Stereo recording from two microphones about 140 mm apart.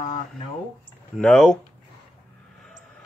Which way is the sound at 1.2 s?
5° left (ahead or behind).